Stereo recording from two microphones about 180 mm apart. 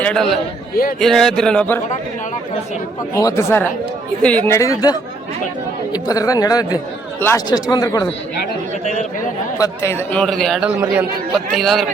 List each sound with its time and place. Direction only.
0.0 s a man's voice: 5° left (ahead or behind)
3.2 s speech: 15° left (ahead or behind)
8.8 s speech: 40° left (ahead or behind)
9.6 s a man's voice: 15° left (ahead or behind)